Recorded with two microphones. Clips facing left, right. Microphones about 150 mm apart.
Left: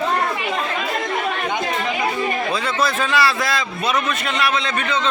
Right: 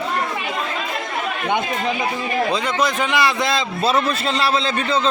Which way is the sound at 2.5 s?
15° right (ahead or behind).